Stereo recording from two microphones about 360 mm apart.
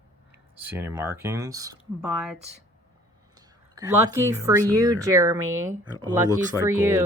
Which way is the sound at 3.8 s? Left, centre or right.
Centre.